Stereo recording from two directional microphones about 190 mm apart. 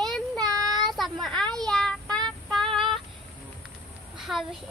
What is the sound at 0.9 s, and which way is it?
A child's voice, centre (ahead or behind).